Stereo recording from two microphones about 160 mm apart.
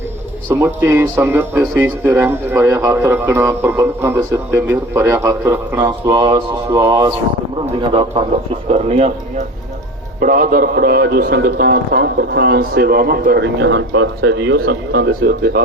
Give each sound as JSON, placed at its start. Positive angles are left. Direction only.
{"t": 0.5, "sound": "speech", "side_deg": -15}
{"t": 7.8, "sound": "a man's voice", "side_deg": -30}
{"t": 8.7, "sound": "speech", "side_deg": -40}
{"t": 10.2, "sound": "a man's voice", "side_deg": -60}